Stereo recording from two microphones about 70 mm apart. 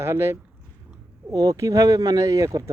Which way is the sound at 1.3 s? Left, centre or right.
Right.